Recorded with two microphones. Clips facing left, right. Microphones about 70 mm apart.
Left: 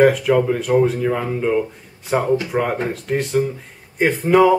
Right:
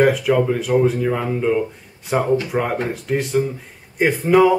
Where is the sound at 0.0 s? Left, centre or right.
Centre.